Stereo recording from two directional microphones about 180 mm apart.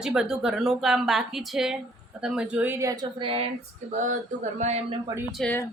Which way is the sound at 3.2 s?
30° right (ahead or behind).